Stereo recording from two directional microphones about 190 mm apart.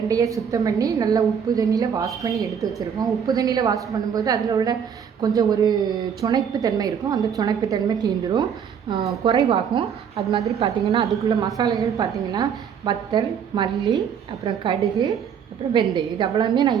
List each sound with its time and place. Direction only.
0.1 s a woman's voice: 15° right (ahead or behind)
9.2 s a woman's voice: 25° right (ahead or behind)
11.2 s a woman's voice: 20° right (ahead or behind)